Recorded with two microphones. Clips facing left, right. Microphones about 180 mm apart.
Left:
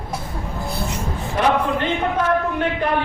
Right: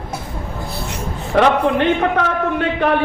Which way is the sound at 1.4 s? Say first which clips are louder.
Right 5 dB; 75° right (ahead or behind).